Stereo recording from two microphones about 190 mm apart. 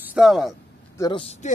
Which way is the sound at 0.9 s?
20° left (ahead or behind).